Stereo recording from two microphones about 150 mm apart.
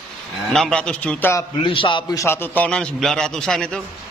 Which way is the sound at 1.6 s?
35° left (ahead or behind).